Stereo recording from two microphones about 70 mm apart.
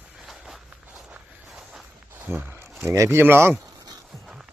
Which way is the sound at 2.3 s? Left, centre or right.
Right.